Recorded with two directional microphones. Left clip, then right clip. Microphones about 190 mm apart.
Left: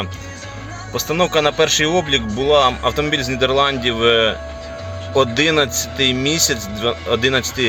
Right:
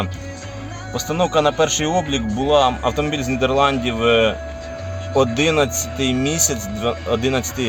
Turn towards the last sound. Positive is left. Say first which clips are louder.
# left 4 dB
turn(degrees=0)  # may be behind; listen again after turning